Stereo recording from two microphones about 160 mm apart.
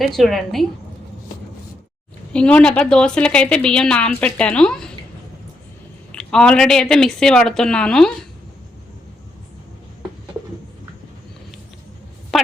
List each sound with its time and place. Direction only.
0.2 s speech: centre (ahead or behind)
2.3 s a woman's voice: 5° left (ahead or behind)
6.1 s speech: 5° left (ahead or behind)
12.3 s a sound: centre (ahead or behind)